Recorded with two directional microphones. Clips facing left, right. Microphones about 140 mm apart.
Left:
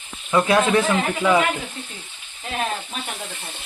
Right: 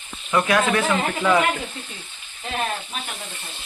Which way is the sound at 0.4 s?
25° left (ahead or behind).